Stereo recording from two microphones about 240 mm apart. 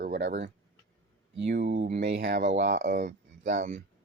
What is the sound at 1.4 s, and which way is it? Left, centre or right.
Speech, right.